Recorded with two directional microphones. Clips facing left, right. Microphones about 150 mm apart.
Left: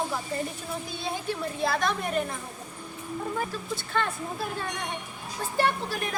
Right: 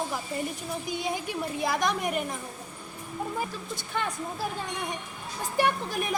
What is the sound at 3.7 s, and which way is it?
Speech, 15° right (ahead or behind).